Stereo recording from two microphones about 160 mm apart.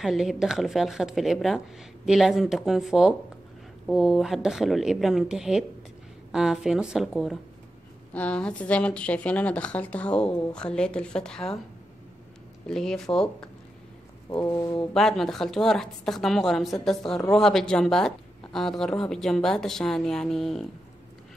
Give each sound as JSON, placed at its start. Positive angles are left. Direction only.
{"t": 0.0, "sound": "speech", "side_deg": 0}
{"t": 12.6, "sound": "speech", "side_deg": 5}
{"t": 14.4, "sound": "speech", "side_deg": 25}
{"t": 15.0, "sound": "speech", "side_deg": 5}